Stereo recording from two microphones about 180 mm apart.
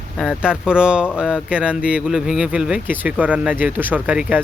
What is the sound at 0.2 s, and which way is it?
Speech, 5° right (ahead or behind).